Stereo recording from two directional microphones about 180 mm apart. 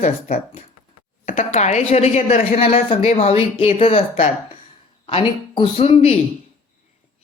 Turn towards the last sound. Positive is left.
turn(degrees=35)  # may be behind; listen again after turning